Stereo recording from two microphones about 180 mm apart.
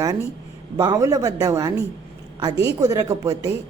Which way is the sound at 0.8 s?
20° right (ahead or behind).